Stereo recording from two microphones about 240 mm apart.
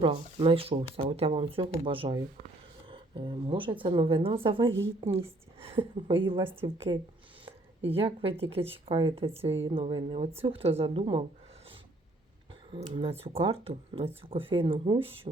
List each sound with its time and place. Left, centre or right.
0.0 s speech: right
7.9 s speech: right
12.7 s speech: right